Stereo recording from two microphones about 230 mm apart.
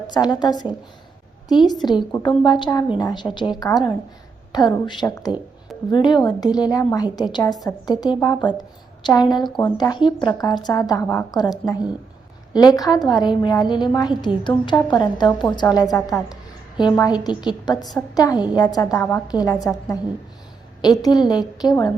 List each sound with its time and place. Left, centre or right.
0.1 s a woman's voice: centre
15.3 s a woman's voice: centre